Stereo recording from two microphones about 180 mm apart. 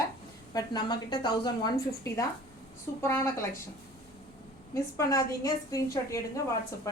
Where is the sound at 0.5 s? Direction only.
25° left (ahead or behind).